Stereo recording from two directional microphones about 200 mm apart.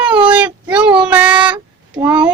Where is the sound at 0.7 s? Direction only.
5° right (ahead or behind).